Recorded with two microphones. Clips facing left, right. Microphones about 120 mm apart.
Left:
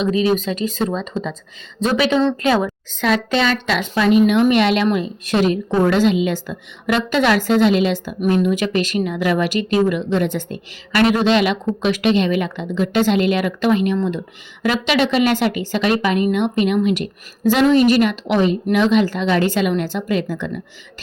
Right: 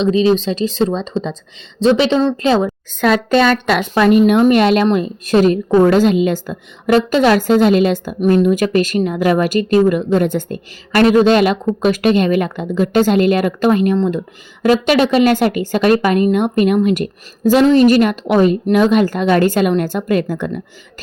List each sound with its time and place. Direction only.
0.0 s a woman's voice: 30° right (ahead or behind)
3.0 s a woman's voice: 45° right (ahead or behind)